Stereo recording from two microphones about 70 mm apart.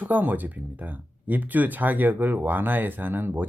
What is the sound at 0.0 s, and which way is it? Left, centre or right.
Speech, right.